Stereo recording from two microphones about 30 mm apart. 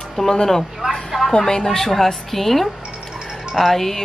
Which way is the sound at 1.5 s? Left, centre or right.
Left.